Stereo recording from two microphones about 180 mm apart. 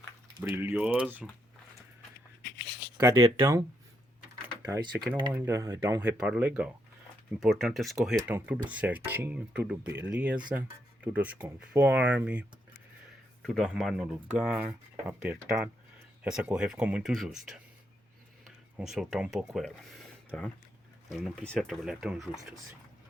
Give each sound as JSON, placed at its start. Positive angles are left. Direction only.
{"t": 0.3, "sound": "speech", "side_deg": -10}
{"t": 3.0, "sound": "speech", "side_deg": -15}
{"t": 4.6, "sound": "speech", "side_deg": -20}
{"t": 13.4, "sound": "speech", "side_deg": 5}